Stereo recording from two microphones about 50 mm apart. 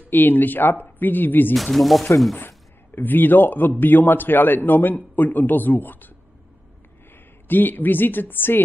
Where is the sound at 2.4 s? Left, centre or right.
Left.